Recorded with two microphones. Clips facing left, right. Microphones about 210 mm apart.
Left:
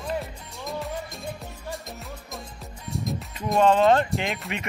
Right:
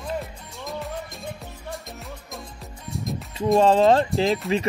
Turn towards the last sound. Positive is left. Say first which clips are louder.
# right 10 dB
turn(degrees=0)  # may be behind; listen again after turning